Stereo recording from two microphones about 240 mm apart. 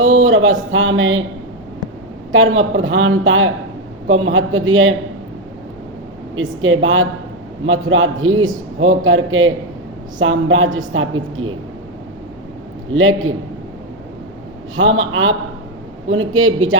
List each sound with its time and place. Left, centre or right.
0.0 s a sound: right
0.7 s speech: right
2.3 s speech: right
6.3 s speech: right
12.9 s speech: right
14.8 s speech: right